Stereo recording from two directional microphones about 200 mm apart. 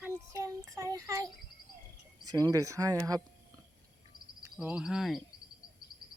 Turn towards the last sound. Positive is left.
turn(degrees=0)  # may be behind; listen again after turning